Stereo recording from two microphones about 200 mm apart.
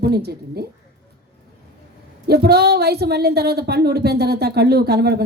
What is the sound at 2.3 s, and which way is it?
A woman's voice, 55° right (ahead or behind).